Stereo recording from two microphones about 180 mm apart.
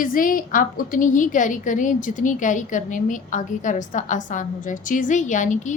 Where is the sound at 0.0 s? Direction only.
50° left (ahead or behind).